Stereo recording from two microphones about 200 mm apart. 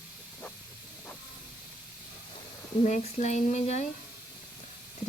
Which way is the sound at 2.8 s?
35° left (ahead or behind).